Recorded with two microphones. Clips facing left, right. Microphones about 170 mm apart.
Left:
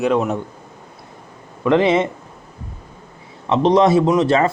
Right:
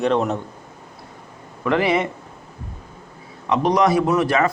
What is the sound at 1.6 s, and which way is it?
Speech, 20° left (ahead or behind).